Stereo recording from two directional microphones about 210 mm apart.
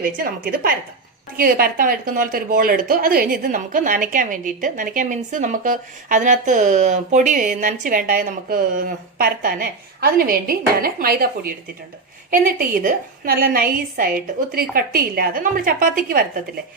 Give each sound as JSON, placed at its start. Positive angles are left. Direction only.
{"t": 1.4, "sound": "a woman's voice", "side_deg": -45}